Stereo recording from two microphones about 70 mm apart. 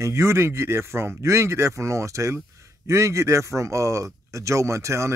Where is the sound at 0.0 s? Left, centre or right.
Right.